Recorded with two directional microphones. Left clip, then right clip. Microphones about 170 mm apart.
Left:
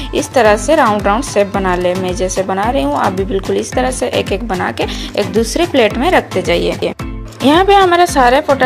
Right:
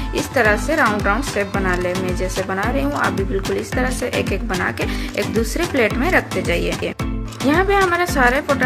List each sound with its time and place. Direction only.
0.1 s a woman's voice: 25° left (ahead or behind)